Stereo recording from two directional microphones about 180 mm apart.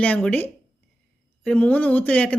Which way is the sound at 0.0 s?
10° left (ahead or behind).